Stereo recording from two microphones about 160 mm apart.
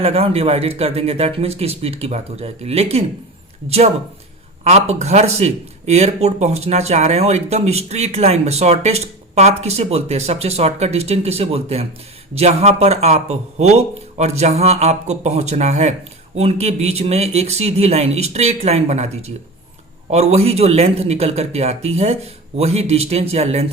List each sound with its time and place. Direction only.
0.0 s speech: 40° right (ahead or behind)
4.6 s speech: 45° right (ahead or behind)